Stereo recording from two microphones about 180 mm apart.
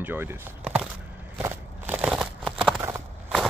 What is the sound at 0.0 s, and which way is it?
Speech, 10° right (ahead or behind).